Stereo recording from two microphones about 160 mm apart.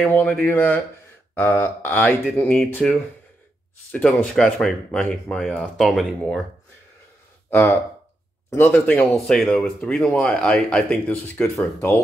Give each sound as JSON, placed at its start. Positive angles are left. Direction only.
{"t": 0.1, "sound": "speech", "side_deg": 10}
{"t": 7.4, "sound": "speech", "side_deg": 10}
{"t": 11.5, "sound": "speech", "side_deg": 20}